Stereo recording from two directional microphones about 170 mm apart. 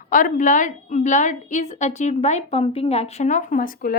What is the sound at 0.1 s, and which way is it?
A woman's voice, 50° left (ahead or behind).